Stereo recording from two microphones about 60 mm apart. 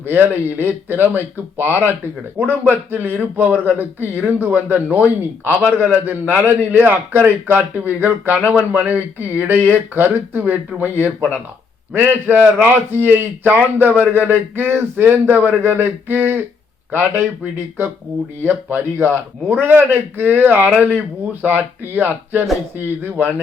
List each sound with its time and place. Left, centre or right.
0.1 s a man's voice: right
18.4 s a man's voice: right